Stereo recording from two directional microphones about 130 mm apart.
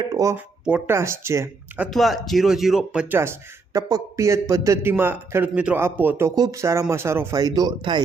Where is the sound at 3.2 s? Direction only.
20° right (ahead or behind).